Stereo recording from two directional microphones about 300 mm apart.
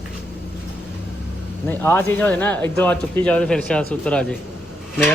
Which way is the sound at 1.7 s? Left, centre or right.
Centre.